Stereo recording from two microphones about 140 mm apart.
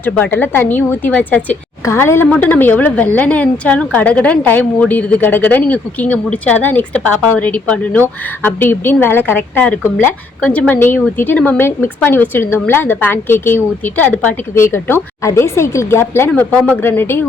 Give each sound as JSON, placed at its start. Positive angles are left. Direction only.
{"t": 0.0, "sound": "a woman's voice", "side_deg": 15}